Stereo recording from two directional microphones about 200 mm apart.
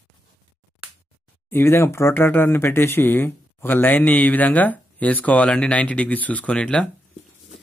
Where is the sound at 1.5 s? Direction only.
10° left (ahead or behind).